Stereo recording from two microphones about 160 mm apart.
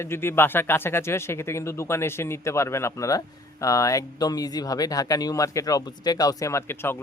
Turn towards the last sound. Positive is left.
turn(degrees=15)  # may be behind; listen again after turning